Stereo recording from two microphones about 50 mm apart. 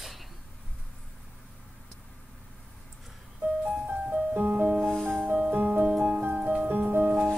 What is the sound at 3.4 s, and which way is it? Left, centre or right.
Music, right.